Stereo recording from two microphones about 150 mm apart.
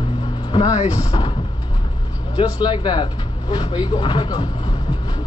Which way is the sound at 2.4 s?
25° left (ahead or behind).